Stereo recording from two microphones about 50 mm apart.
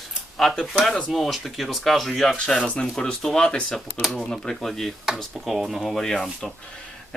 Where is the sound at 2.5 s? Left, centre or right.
Centre.